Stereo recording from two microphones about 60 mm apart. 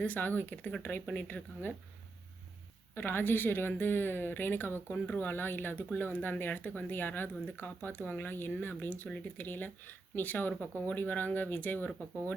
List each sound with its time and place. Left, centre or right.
0.0 s speech: left
2.9 s speech: left